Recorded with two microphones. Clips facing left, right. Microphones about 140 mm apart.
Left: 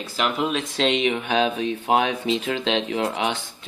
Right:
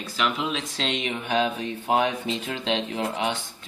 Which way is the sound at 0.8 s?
80° left.